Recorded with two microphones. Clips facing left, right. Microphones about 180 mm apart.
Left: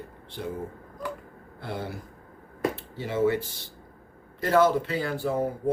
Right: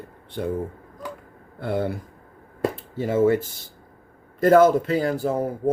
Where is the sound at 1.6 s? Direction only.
55° right (ahead or behind).